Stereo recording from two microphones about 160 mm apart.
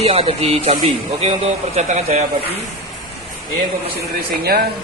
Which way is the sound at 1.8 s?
45° right (ahead or behind).